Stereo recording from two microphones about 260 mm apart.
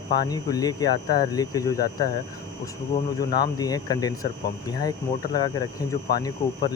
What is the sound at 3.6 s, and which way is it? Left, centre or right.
Speech, centre.